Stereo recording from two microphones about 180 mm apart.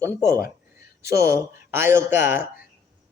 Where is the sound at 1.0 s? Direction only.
15° right (ahead or behind).